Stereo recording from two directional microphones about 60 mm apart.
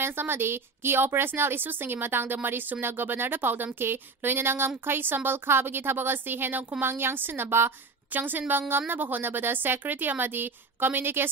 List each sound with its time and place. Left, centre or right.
0.0 s a woman's voice: right